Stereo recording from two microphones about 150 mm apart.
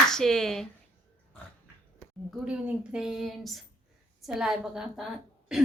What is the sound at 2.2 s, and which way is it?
A woman's voice, 5° right (ahead or behind).